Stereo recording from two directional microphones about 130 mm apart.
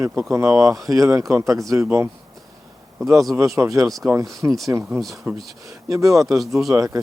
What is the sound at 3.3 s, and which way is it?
Speech, 20° right (ahead or behind).